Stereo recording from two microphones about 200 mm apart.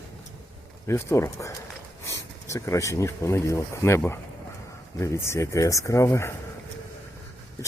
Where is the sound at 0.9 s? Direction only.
15° left (ahead or behind).